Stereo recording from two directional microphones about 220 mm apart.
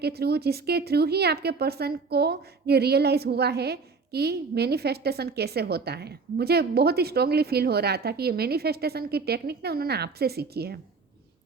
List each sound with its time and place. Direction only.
0.0 s a woman's voice: 45° right (ahead or behind)